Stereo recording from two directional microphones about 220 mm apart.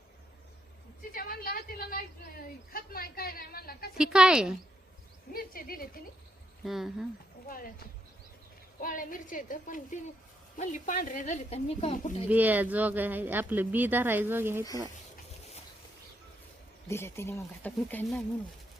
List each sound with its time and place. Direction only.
1.1 s a woman's voice: 40° left (ahead or behind)
3.9 s a woman's voice: 5° right (ahead or behind)
5.3 s speech: 40° left (ahead or behind)
6.7 s a woman's voice: centre (ahead or behind)
7.4 s speech: 40° left (ahead or behind)
8.8 s speech: 40° left (ahead or behind)
12.3 s speech: 10° right (ahead or behind)
16.9 s speech: 10° left (ahead or behind)